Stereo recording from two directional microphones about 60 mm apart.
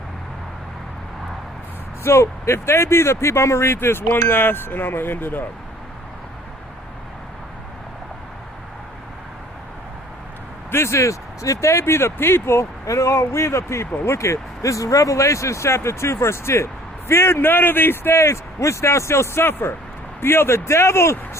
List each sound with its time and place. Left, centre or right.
2.0 s speech: left
10.7 s speech: left